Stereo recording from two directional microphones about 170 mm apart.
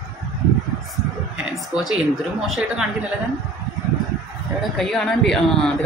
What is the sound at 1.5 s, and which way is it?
Speech, centre (ahead or behind).